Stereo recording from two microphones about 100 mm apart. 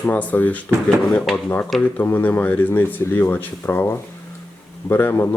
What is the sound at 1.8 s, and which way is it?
Speech, 20° left (ahead or behind).